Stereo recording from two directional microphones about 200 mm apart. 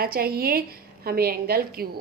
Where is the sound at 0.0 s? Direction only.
50° right (ahead or behind).